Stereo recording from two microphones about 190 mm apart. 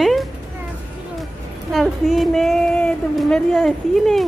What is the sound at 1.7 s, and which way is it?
Speech, centre (ahead or behind).